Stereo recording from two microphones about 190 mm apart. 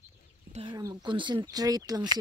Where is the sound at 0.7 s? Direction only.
20° right (ahead or behind).